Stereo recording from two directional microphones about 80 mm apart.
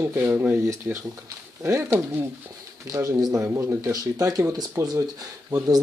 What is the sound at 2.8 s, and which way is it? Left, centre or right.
Speech, right.